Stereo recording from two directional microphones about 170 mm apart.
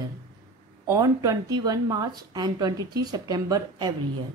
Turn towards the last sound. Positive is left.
turn(degrees=-25)  # may be behind; listen again after turning